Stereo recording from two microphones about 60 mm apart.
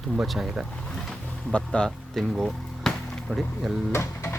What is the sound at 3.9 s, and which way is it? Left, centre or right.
Speech, left.